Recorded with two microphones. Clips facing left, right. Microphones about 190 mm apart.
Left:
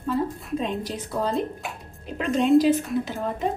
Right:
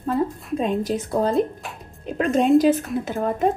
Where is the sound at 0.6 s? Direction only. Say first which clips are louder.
Right 6 dB; 50° right (ahead or behind).